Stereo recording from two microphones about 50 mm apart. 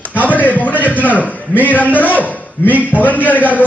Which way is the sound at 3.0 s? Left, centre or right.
Left.